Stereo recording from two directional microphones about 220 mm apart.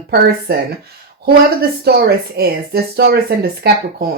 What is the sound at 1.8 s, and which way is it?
Speech, 45° right (ahead or behind).